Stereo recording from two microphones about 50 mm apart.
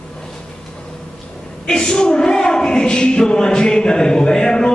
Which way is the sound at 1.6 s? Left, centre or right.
Centre.